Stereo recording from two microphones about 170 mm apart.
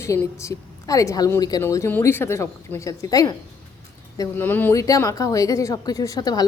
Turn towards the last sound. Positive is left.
turn(degrees=20)  # may be behind; listen again after turning